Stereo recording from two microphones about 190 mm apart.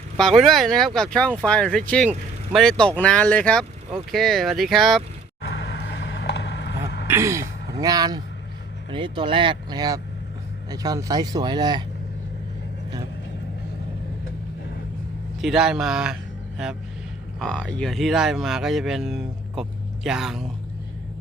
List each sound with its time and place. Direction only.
0.2 s speech: centre (ahead or behind)
5.4 s vehicle: 65° left (ahead or behind)
7.1 s speech: 15° right (ahead or behind)
15.4 s speech: centre (ahead or behind)
17.4 s speech: 5° left (ahead or behind)